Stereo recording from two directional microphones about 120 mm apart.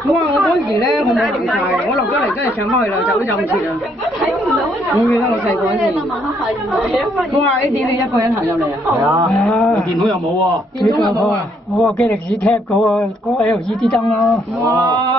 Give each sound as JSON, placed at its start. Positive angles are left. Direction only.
{"t": 0.1, "sound": "a woman's voice", "side_deg": 0}
{"t": 4.2, "sound": "chatter", "side_deg": 0}
{"t": 5.0, "sound": "speech", "side_deg": 25}
{"t": 6.7, "sound": "a man's voice", "side_deg": 0}
{"t": 9.4, "sound": "a man's voice", "side_deg": 5}
{"t": 11.1, "sound": "a man's voice", "side_deg": 0}